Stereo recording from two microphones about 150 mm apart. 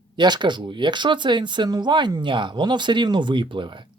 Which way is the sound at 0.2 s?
30° right (ahead or behind).